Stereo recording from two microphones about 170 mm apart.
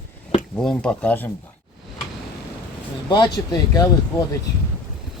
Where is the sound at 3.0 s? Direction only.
25° left (ahead or behind).